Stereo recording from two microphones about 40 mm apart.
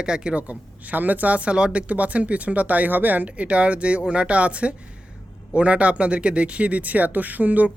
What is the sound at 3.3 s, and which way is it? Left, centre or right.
Speech, right.